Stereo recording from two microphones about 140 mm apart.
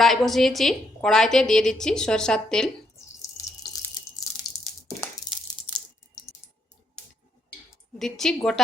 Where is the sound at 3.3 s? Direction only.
25° left (ahead or behind).